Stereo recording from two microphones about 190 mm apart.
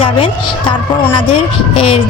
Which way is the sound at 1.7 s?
30° left (ahead or behind).